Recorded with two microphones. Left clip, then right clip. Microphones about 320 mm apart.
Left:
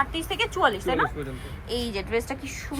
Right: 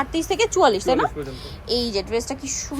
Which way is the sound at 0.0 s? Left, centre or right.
Centre.